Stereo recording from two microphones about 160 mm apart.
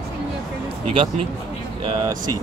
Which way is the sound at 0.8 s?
40° right (ahead or behind).